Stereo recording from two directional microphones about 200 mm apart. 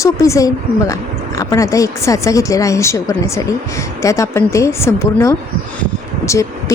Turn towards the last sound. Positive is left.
turn(degrees=15)  # may be behind; listen again after turning